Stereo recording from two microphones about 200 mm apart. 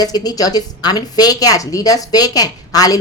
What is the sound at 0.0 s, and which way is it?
A woman's voice, 20° left (ahead or behind).